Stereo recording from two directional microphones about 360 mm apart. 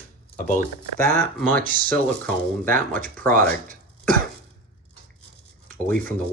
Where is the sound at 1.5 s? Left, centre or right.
Right.